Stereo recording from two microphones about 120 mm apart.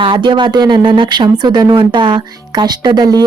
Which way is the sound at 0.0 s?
40° right (ahead or behind).